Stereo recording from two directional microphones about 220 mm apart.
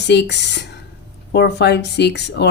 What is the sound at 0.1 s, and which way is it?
Speech, 50° left (ahead or behind).